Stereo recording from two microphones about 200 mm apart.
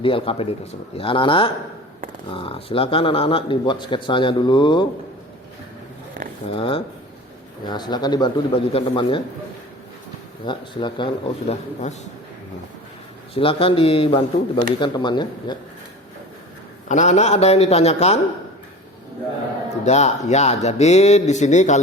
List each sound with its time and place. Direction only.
0.0 s speech: 25° left (ahead or behind)
6.5 s speech: 25° left (ahead or behind)
10.4 s speech: 25° left (ahead or behind)
13.3 s speech: 25° left (ahead or behind)
16.9 s speech: 35° left (ahead or behind)
19.8 s speech: 35° left (ahead or behind)